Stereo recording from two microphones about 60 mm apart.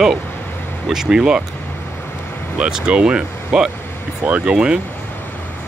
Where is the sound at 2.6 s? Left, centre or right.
Centre.